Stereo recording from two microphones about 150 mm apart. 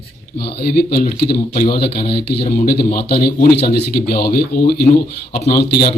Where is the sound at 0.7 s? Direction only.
90° left.